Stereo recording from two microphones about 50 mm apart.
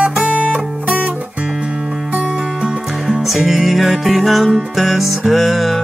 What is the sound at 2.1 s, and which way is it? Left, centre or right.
Music, centre.